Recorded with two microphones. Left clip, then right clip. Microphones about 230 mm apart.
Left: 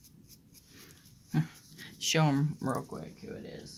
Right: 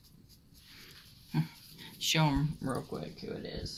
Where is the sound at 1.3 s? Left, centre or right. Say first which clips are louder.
Left 2 dB; left.